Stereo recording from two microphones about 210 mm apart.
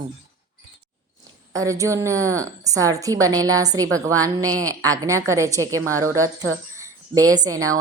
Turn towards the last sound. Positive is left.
turn(degrees=-15)  # may be behind; listen again after turning